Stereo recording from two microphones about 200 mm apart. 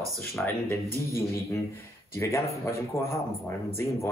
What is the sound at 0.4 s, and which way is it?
Speech, 5° left (ahead or behind).